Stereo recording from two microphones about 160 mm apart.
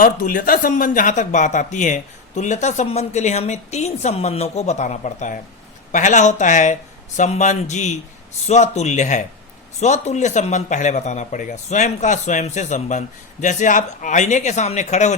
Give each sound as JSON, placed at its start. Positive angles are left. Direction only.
{"t": 0.0, "sound": "speech", "side_deg": 60}